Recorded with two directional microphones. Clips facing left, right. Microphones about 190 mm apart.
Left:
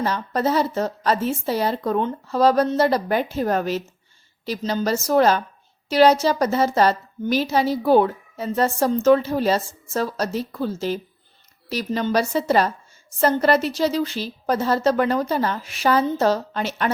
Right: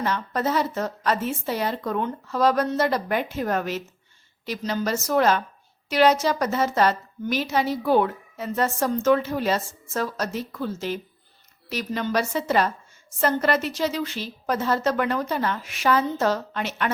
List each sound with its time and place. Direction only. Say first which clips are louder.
0.0 s a woman's voice: left 3 dB; 35° left (ahead or behind)